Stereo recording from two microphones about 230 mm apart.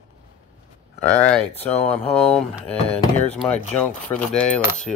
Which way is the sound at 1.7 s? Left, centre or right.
Left.